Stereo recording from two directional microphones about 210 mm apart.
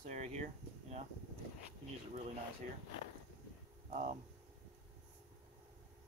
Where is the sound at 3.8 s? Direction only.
30° right (ahead or behind).